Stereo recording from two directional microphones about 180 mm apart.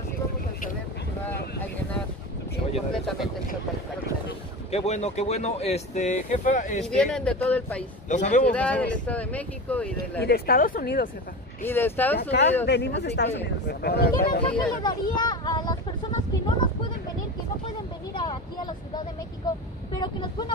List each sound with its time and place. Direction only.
2.9 s a sound: centre (ahead or behind)
4.6 s speech: 35° left (ahead or behind)
6.9 s speech: 5° left (ahead or behind)
8.1 s speech: 40° left (ahead or behind)
8.5 s speech: 5° left (ahead or behind)
10.2 s speech: 60° left (ahead or behind)
11.6 s speech: 10° left (ahead or behind)
12.2 s speech: 70° left (ahead or behind)
13.7 s speech: 60° left (ahead or behind)
14.8 s a sound: 25° left (ahead or behind)
18.1 s vehicle: 25° left (ahead or behind)
20.0 s speech: 25° left (ahead or behind)